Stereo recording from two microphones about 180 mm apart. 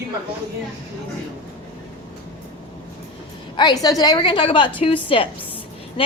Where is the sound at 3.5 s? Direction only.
20° left (ahead or behind).